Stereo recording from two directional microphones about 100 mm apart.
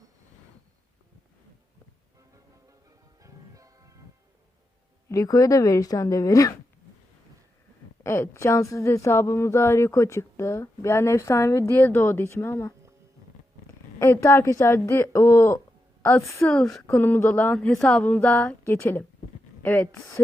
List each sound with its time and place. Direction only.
3.2 s music: 35° right (ahead or behind)
5.0 s a woman's voice: 35° left (ahead or behind)
8.0 s a woman's voice: 25° left (ahead or behind)
14.0 s a woman's voice: 25° left (ahead or behind)